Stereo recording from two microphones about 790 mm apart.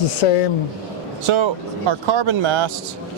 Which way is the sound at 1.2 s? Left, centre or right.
Right.